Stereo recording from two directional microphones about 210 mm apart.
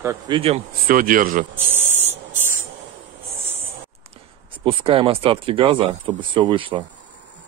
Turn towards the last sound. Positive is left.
turn(degrees=-25)  # may be behind; listen again after turning